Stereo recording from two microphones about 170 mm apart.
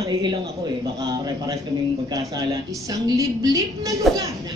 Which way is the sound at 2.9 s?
20° right (ahead or behind).